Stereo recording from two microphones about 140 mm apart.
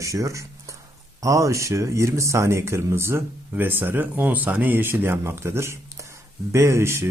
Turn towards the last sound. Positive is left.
turn(degrees=-20)  # may be behind; listen again after turning